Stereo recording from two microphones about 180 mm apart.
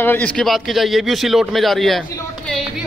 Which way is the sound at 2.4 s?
Centre (ahead or behind).